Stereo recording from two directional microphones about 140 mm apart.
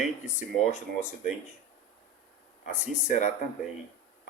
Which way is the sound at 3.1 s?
60° left (ahead or behind).